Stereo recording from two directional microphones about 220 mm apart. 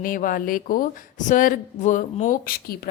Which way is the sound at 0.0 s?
40° left (ahead or behind).